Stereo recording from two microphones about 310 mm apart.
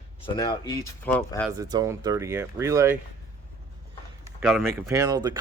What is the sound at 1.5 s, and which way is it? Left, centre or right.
Speech, centre.